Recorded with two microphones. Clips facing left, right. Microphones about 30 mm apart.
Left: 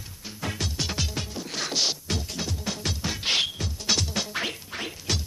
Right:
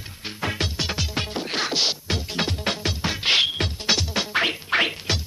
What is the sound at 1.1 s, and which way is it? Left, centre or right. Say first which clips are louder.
Music: right 6 dB; right.